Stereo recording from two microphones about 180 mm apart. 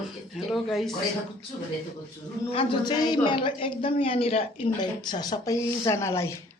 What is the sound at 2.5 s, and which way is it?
Speech, 25° left (ahead or behind).